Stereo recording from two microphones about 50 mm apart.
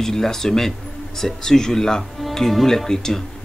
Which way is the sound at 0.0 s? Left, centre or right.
Centre.